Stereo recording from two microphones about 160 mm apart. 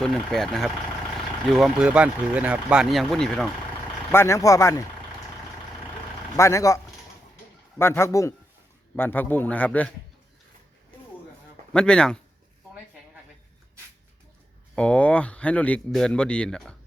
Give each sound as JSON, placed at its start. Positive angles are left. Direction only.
{"t": 0.0, "sound": "speech", "side_deg": 0}
{"t": 4.1, "sound": "speech", "side_deg": 15}
{"t": 6.3, "sound": "speech", "side_deg": 20}
{"t": 7.8, "sound": "speech", "side_deg": 15}
{"t": 11.7, "sound": "speech", "side_deg": 5}
{"t": 14.8, "sound": "speech", "side_deg": 5}